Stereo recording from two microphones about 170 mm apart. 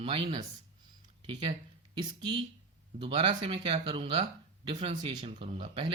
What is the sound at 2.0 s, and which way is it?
Speech, 30° right (ahead or behind).